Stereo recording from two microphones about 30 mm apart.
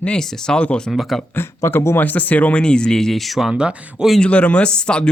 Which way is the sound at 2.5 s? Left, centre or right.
Left.